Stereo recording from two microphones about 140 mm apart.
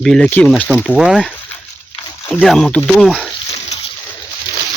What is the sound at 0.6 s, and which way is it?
Speech, 5° right (ahead or behind).